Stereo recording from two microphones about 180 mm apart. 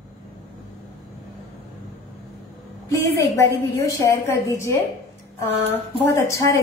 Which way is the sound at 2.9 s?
15° left (ahead or behind).